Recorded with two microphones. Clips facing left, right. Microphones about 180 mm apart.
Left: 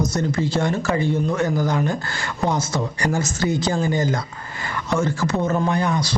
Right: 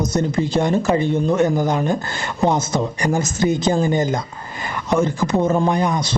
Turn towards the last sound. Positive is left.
turn(degrees=-20)  # may be behind; listen again after turning